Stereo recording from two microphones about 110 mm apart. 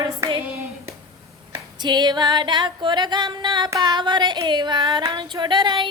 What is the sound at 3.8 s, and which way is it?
Child singing, 40° right (ahead or behind).